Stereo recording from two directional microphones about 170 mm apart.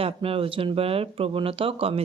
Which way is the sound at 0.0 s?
35° right (ahead or behind).